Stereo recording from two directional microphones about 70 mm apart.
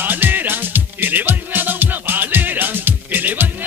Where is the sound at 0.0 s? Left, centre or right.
Right.